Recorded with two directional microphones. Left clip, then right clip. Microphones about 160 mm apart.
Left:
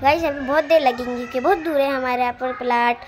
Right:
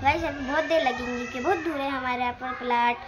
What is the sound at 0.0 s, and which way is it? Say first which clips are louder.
A woman's voice: left 7 dB; 35° left (ahead or behind).